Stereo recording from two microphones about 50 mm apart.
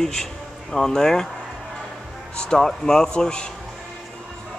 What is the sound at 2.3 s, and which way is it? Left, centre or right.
Speech, centre.